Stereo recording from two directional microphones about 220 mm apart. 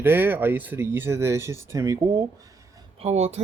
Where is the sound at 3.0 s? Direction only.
30° right (ahead or behind).